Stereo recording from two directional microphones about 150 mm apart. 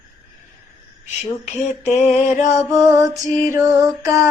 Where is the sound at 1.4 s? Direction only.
50° left (ahead or behind).